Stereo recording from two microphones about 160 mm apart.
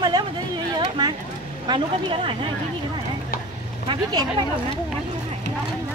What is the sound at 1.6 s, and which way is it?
Speech, 30° right (ahead or behind).